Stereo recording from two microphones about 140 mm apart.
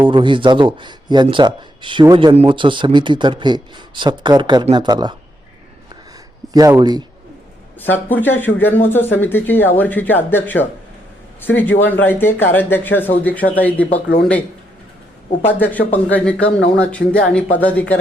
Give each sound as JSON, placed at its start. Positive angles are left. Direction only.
{"t": 0.1, "sound": "speech", "side_deg": -35}
{"t": 6.5, "sound": "speech", "side_deg": -25}
{"t": 7.8, "sound": "speech", "side_deg": 15}
{"t": 15.5, "sound": "speech", "side_deg": 10}